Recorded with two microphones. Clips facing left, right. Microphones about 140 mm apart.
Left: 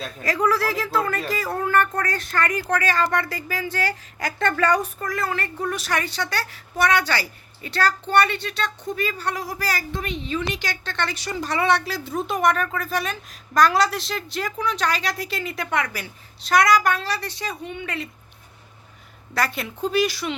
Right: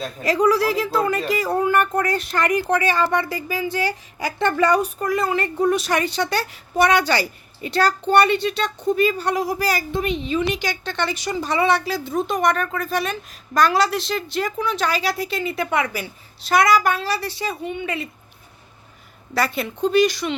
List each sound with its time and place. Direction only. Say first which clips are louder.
0.2 s a woman's voice: right 4 dB; 20° right (ahead or behind)
10.6 s speech: right 4 dB; 5° right (ahead or behind)
10.9 s a woman's voice: right 2 dB; 15° right (ahead or behind)
11.4 s speech: right 2 dB; centre (ahead or behind)
19.3 s speech: right 3 dB; centre (ahead or behind)